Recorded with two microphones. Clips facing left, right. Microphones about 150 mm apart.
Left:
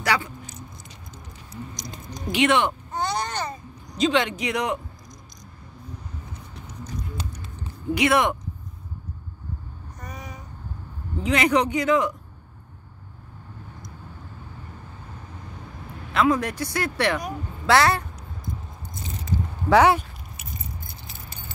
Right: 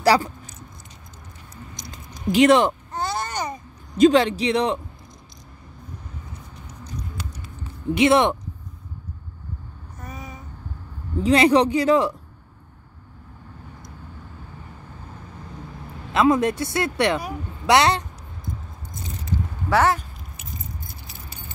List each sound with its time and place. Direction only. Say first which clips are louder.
0.0 s speech: right 7 dB; 35° right (ahead or behind)
2.3 s speech: right 5 dB; 35° right (ahead or behind)
2.9 s baby cry: even; centre (ahead or behind)
4.0 s speech: right 7 dB; 35° right (ahead or behind)
7.9 s speech: right 4 dB; 25° right (ahead or behind)
9.9 s babbling: right 2 dB; centre (ahead or behind)
11.2 s speech: right 5 dB; 30° right (ahead or behind)
16.1 s speech: right 3 dB; 20° right (ahead or behind)
19.7 s speech: left 3 dB; 15° left (ahead or behind)